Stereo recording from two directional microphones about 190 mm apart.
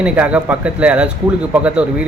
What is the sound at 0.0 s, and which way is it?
Speech, 5° right (ahead or behind).